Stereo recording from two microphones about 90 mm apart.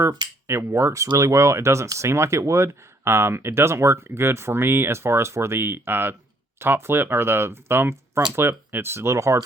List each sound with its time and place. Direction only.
0.4 s speech: 30° right (ahead or behind)